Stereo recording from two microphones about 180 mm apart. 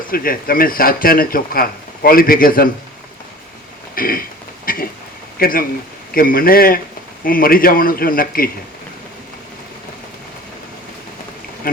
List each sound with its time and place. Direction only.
0.1 s speech: 55° left (ahead or behind)
3.9 s a sound: 55° left (ahead or behind)
5.4 s speech: 50° left (ahead or behind)
11.6 s speech: 55° left (ahead or behind)